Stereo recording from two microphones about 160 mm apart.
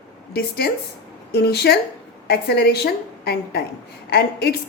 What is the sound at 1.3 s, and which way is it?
A woman's voice, 90° left.